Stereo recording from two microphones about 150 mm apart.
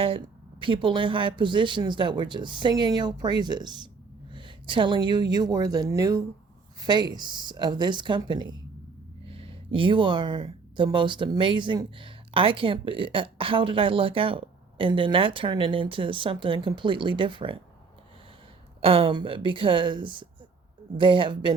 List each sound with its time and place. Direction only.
0.0 s speech: 35° right (ahead or behind)
18.8 s speech: 40° right (ahead or behind)